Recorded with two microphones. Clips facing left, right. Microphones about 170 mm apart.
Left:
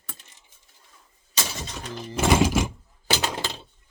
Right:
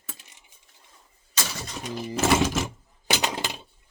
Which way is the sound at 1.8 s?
10° right (ahead or behind).